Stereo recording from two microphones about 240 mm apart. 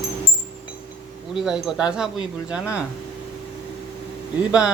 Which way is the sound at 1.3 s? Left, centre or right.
Centre.